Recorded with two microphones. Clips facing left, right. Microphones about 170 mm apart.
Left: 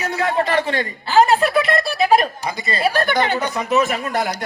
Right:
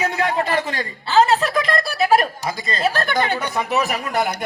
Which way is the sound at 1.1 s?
15° left (ahead or behind).